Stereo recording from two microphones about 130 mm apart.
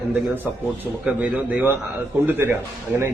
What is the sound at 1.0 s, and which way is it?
Speech, 10° right (ahead or behind).